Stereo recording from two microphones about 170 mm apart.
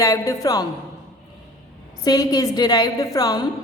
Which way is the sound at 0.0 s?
20° left (ahead or behind).